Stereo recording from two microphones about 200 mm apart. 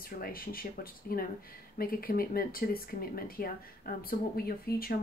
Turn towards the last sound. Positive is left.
turn(degrees=50)  # may be behind; listen again after turning